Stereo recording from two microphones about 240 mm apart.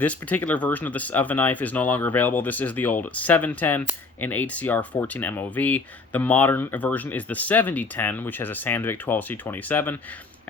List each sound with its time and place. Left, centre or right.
0.0 s speech: centre